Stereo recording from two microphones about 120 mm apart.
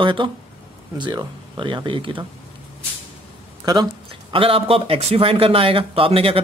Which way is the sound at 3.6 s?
35° right (ahead or behind).